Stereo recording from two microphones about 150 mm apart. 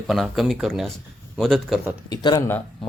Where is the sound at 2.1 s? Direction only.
30° left (ahead or behind).